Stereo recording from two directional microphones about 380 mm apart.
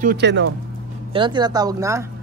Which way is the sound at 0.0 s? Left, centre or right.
Right.